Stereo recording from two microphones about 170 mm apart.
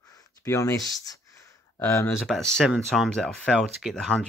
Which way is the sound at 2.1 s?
Centre (ahead or behind).